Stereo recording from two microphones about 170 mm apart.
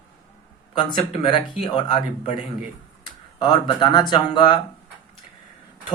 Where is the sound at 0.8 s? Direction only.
30° left (ahead or behind).